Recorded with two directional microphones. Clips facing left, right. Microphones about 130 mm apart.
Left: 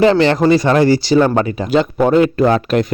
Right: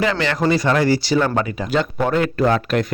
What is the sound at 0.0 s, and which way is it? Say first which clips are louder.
Speech: left 8 dB; 30° left (ahead or behind).